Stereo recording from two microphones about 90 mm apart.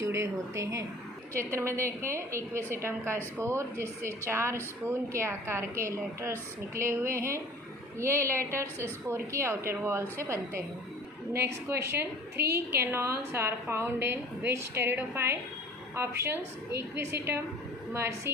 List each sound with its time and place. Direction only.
0.0 s a woman's voice: 35° right (ahead or behind)